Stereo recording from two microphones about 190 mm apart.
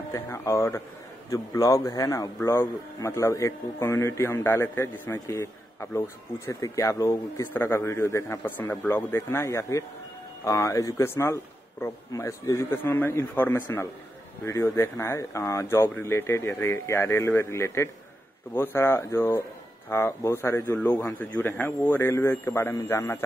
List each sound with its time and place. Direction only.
0.1 s a man's voice: 15° left (ahead or behind)